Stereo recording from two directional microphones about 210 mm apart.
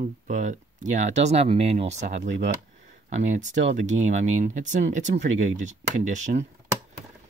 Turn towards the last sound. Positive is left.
turn(degrees=-35)  # may be behind; listen again after turning